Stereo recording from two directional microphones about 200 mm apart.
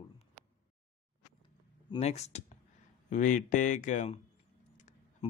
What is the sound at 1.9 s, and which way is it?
Speech, 35° left (ahead or behind).